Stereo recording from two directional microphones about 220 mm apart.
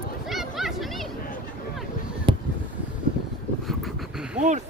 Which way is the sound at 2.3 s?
20° right (ahead or behind).